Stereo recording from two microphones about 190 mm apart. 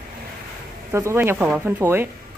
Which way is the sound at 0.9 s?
15° right (ahead or behind).